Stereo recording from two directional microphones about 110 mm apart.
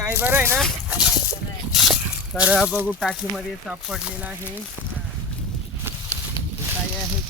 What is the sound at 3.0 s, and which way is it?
Speech, centre (ahead or behind).